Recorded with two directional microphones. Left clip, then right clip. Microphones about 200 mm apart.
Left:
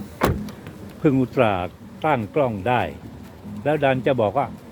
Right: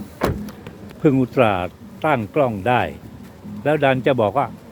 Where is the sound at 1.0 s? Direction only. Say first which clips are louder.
Right 3 dB; 10° right (ahead or behind).